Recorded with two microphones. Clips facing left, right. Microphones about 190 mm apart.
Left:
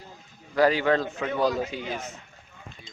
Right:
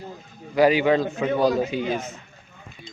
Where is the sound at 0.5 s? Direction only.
15° right (ahead or behind).